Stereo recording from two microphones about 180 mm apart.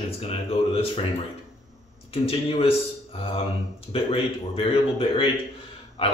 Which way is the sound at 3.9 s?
30° left (ahead or behind).